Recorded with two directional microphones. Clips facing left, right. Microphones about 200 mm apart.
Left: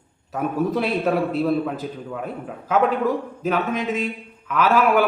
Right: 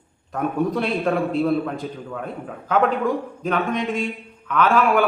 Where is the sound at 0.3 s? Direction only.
5° left (ahead or behind).